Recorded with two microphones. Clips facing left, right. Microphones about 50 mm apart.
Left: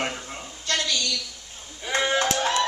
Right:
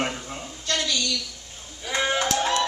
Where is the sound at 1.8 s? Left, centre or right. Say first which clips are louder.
Left 1 dB; left.